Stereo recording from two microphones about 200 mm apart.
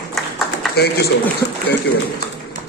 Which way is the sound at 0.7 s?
55° left (ahead or behind).